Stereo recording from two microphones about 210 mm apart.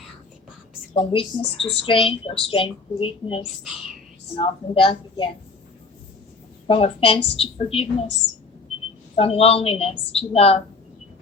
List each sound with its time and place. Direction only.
0.9 s a woman's voice: 25° left (ahead or behind)
6.7 s a woman's voice: 25° left (ahead or behind)
9.1 s a woman's voice: 30° left (ahead or behind)